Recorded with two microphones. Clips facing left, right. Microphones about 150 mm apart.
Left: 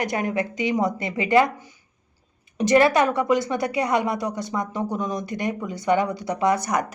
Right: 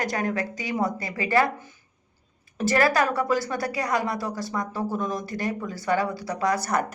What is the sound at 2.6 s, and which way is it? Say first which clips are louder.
A woman's voice: left 4 dB; 20° left (ahead or behind).